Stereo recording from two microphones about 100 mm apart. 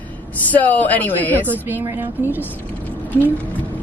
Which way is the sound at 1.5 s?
20° right (ahead or behind).